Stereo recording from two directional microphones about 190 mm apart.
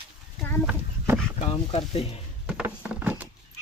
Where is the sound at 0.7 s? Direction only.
10° right (ahead or behind).